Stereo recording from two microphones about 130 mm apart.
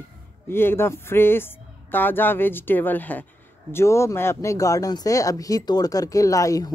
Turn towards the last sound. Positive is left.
turn(degrees=25)  # may be behind; listen again after turning